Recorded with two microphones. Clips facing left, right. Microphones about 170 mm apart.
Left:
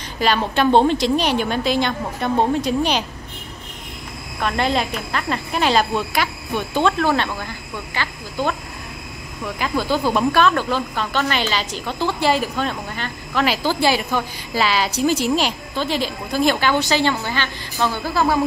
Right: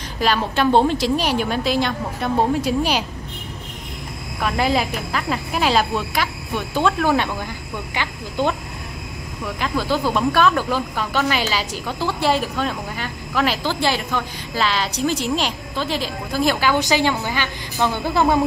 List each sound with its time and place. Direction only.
0.2 s speech: centre (ahead or behind)
4.4 s a woman's voice: 5° right (ahead or behind)
9.4 s a woman's voice: centre (ahead or behind); by 18.4 s 20° right (ahead or behind)